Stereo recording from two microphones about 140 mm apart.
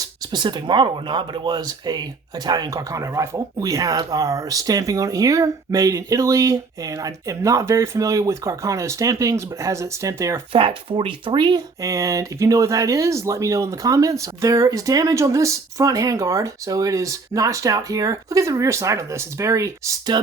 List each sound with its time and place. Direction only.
0.0 s speech: 30° right (ahead or behind)
10.5 s speech: 40° right (ahead or behind)
11.8 s speech: 25° right (ahead or behind)